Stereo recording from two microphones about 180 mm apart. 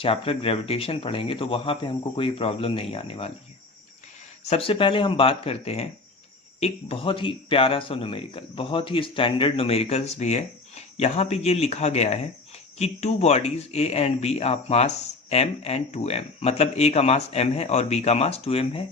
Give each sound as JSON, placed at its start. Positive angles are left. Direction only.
{"t": 0.0, "sound": "speech", "side_deg": 30}
{"t": 4.4, "sound": "speech", "side_deg": 30}